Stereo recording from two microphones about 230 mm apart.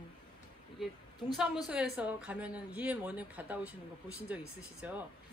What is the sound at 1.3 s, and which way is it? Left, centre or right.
A woman's voice, centre.